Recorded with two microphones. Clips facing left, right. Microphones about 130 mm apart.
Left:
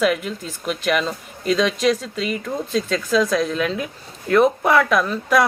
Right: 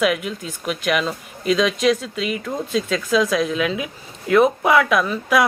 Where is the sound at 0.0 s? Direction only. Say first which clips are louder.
Even; 5° right (ahead or behind).